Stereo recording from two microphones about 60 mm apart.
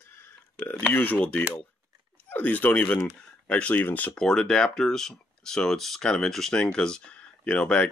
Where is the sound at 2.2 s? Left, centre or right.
Left.